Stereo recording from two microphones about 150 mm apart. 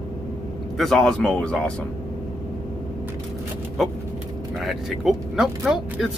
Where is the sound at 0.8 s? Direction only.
5° left (ahead or behind).